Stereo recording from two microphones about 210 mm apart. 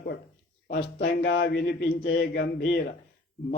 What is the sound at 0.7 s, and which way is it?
Speech, 50° left (ahead or behind).